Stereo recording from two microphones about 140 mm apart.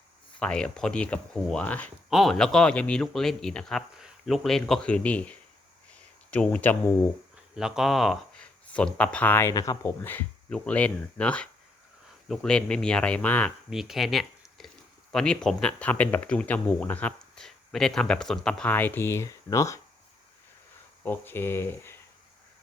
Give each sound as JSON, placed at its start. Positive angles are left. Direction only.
{"t": 0.3, "sound": "speech", "side_deg": 5}
{"t": 6.3, "sound": "speech", "side_deg": 10}
{"t": 7.5, "sound": "speech", "side_deg": -5}
{"t": 13.7, "sound": "speech", "side_deg": -5}
{"t": 21.0, "sound": "speech", "side_deg": 15}